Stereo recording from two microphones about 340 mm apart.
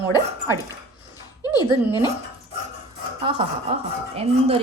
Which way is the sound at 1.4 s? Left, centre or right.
Centre.